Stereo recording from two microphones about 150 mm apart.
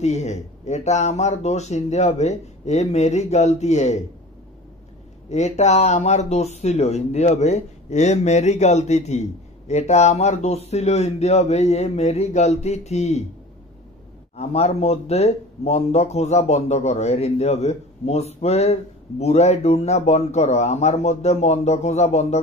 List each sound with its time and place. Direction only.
0.0 s speech: 50° left (ahead or behind)
5.3 s speech: 50° left (ahead or behind)
14.3 s speech: 45° left (ahead or behind)